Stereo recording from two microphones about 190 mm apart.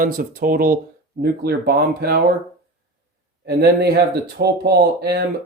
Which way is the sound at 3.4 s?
60° right (ahead or behind).